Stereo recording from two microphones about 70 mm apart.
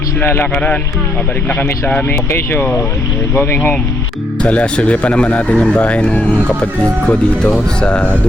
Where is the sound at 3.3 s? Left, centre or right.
Left.